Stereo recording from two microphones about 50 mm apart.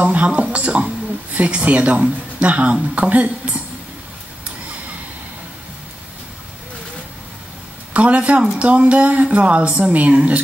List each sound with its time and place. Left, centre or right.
0.0 s a sound: right
1.3 s speech: right
7.9 s speech: right